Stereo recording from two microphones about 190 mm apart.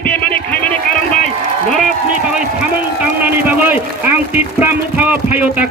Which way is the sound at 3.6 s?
10° right (ahead or behind).